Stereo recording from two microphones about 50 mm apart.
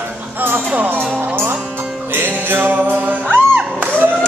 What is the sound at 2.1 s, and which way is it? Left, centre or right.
Music, right.